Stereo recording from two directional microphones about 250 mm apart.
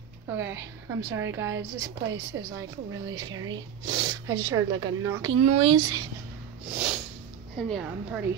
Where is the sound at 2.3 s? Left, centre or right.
Right.